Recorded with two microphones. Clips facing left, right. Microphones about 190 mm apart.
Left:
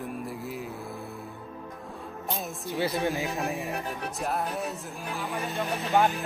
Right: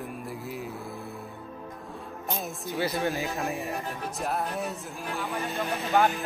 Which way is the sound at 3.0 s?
15° left (ahead or behind).